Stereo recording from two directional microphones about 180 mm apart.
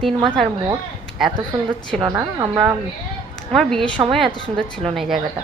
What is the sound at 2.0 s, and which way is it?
Speech, 20° right (ahead or behind).